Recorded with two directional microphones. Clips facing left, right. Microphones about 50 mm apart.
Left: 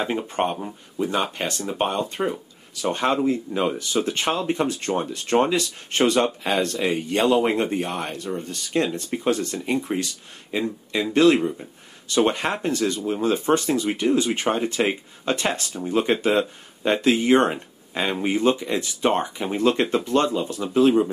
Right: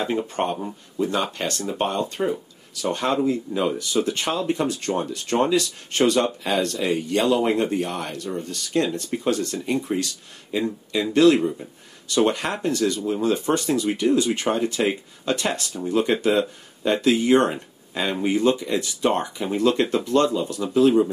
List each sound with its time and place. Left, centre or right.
0.0 s speech: centre